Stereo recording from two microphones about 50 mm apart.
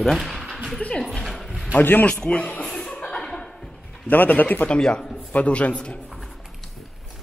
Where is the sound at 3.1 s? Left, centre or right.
Centre.